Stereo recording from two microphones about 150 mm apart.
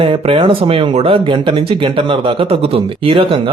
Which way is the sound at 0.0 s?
35° right (ahead or behind).